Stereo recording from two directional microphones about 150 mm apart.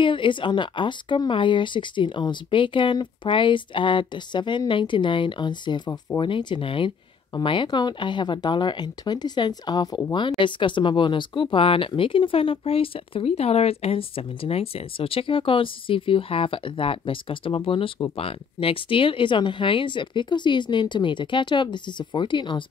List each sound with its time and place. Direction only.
0.0 s speech: 35° left (ahead or behind)